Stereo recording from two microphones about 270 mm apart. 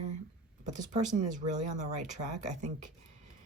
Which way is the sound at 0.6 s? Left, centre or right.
Right.